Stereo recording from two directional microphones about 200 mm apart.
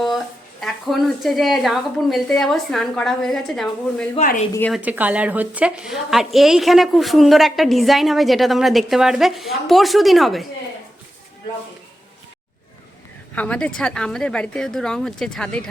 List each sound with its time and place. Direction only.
0.6 s a woman's voice: centre (ahead or behind)
4.1 s a woman's voice: 40° left (ahead or behind)
4.7 s a woman's voice: 10° right (ahead or behind)
13.3 s a woman's voice: 5° left (ahead or behind)